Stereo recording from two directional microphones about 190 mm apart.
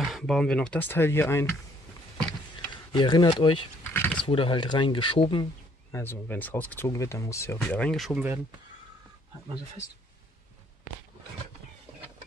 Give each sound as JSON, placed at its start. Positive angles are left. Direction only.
{"t": 0.0, "sound": "speech", "side_deg": 0}
{"t": 2.9, "sound": "speech", "side_deg": 25}
{"t": 3.8, "sound": "a sound", "side_deg": 10}
{"t": 4.2, "sound": "speech", "side_deg": 25}
{"t": 5.9, "sound": "speech", "side_deg": 10}
{"t": 7.6, "sound": "speech", "side_deg": 5}